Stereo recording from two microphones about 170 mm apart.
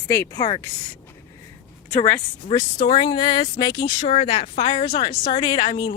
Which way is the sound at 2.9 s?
30° left (ahead or behind).